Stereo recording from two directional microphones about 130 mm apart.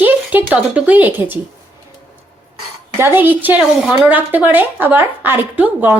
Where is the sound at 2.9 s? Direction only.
15° right (ahead or behind).